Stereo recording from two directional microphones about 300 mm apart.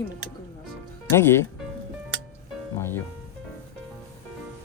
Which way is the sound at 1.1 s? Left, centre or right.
Centre.